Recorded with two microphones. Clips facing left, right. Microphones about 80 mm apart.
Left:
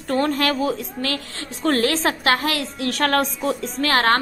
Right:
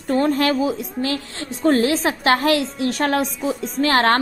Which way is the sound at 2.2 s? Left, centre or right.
Right.